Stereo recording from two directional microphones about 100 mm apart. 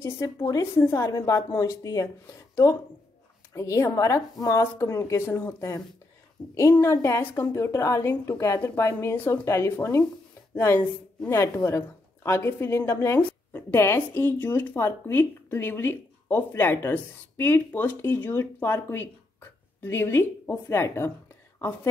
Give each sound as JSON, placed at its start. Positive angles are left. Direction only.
{"t": 0.0, "sound": "a woman's voice", "side_deg": 30}
{"t": 6.4, "sound": "a woman's voice", "side_deg": 55}
{"t": 6.7, "sound": "a woman's voice", "side_deg": 25}